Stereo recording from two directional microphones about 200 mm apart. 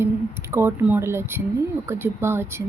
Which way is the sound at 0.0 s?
10° right (ahead or behind).